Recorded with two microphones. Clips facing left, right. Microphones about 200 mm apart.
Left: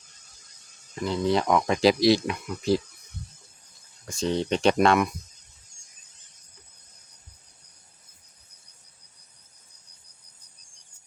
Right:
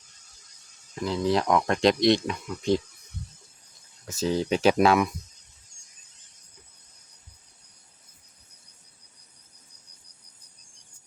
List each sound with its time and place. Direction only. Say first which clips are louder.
0.9 s speech: even; centre (ahead or behind)
4.0 s speech: even; 5° right (ahead or behind)